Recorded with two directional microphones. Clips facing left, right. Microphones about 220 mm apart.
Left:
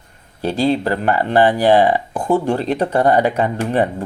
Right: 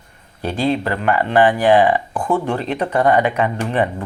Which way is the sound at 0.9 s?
35° left (ahead or behind).